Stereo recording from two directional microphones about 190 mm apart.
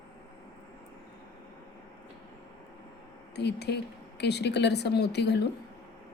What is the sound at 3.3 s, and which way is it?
A woman's voice, 60° left (ahead or behind).